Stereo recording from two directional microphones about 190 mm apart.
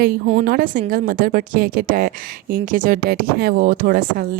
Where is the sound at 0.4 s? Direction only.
50° right (ahead or behind).